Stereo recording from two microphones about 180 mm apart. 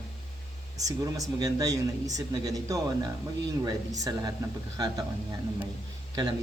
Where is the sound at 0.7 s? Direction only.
20° right (ahead or behind).